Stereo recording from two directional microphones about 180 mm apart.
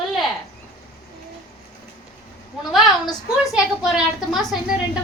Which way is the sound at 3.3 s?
Centre (ahead or behind).